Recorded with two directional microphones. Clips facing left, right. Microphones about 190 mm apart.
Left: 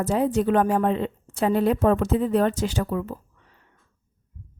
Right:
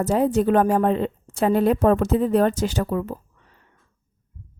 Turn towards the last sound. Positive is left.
turn(degrees=-45)  # may be behind; listen again after turning